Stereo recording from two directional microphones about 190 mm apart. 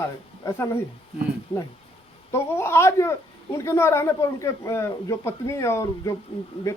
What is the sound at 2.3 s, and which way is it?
Speech, 15° left (ahead or behind).